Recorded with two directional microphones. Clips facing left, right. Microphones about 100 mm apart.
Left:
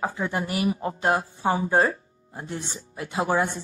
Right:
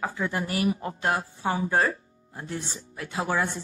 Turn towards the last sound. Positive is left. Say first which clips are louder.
# left 3 dB
turn(degrees=25)  # may be behind; listen again after turning